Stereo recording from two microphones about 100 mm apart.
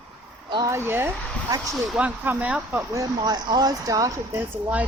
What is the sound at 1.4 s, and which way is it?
Speech, 35° right (ahead or behind).